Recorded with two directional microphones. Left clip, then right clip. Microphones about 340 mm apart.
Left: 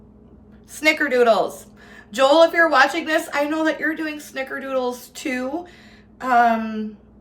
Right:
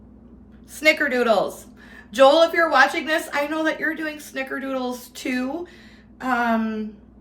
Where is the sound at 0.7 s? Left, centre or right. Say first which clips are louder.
Even; centre.